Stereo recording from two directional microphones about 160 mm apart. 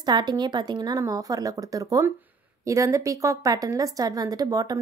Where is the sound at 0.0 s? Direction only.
25° right (ahead or behind).